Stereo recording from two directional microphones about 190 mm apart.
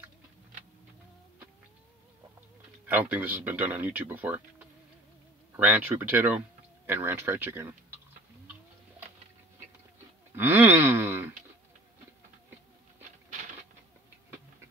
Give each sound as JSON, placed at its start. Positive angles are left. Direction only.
{"t": 2.9, "sound": "speech", "side_deg": -10}
{"t": 10.3, "sound": "wail", "side_deg": -10}